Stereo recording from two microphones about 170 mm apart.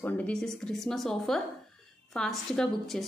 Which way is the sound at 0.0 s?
10° left (ahead or behind).